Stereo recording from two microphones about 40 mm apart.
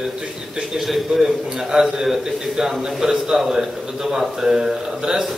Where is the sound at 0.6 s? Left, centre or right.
Centre.